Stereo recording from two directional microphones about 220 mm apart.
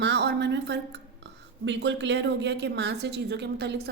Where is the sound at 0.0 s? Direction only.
50° right (ahead or behind).